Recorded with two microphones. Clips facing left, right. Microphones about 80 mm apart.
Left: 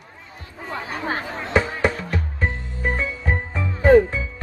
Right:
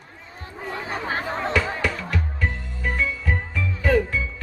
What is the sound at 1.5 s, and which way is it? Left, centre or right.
Music, left.